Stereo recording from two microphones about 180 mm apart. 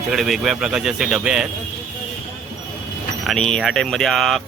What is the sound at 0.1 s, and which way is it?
Speech, centre (ahead or behind).